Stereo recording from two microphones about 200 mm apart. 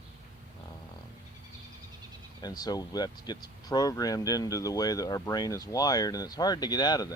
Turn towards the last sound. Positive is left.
turn(degrees=20)  # may be behind; listen again after turning